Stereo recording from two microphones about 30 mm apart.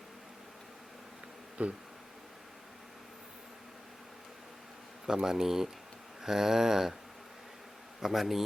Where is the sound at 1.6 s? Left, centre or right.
Right.